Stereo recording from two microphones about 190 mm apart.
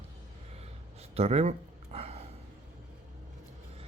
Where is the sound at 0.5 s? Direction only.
35° right (ahead or behind).